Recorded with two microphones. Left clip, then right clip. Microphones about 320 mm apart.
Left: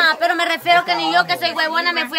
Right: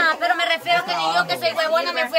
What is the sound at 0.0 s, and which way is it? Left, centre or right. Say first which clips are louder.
A woman's voice: left 3 dB; left.